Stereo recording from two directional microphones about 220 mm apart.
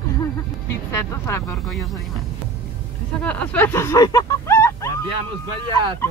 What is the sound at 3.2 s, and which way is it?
Speech, 10° left (ahead or behind).